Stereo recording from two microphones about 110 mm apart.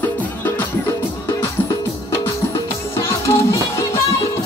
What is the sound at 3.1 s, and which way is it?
Music, 25° left (ahead or behind).